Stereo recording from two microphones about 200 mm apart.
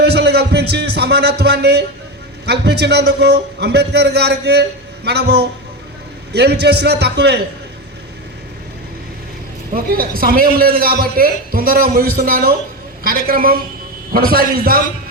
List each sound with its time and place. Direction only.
0.0 s a man's voice: 55° right (ahead or behind)
9.7 s a man's voice: 45° right (ahead or behind)